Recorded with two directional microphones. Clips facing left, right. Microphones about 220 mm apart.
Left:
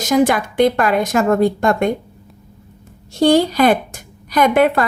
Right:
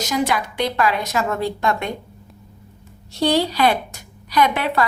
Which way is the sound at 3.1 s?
50° left (ahead or behind).